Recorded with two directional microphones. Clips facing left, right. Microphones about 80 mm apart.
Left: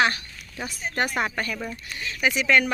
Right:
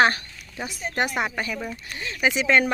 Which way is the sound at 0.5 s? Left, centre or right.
Centre.